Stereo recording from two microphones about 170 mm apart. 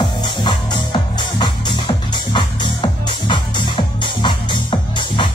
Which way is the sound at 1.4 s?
30° left (ahead or behind).